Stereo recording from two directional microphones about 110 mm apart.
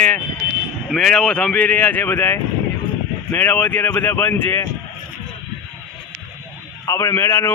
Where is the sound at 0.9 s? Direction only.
5° left (ahead or behind); by 4.6 s 20° left (ahead or behind).